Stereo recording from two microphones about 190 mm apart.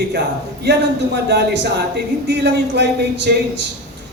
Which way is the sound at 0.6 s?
60° right (ahead or behind).